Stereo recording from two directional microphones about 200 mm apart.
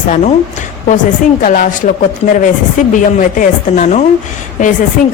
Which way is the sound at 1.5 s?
40° left (ahead or behind).